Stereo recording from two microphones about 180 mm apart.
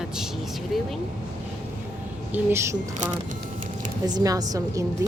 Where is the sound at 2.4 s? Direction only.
15° right (ahead or behind).